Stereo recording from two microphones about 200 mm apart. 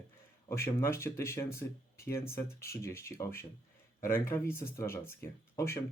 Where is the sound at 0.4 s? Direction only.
15° left (ahead or behind).